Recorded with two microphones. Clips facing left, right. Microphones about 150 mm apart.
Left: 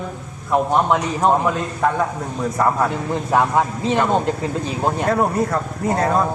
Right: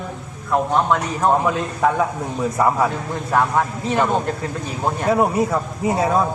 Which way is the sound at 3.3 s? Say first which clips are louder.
Left 1 dB; 15° left (ahead or behind).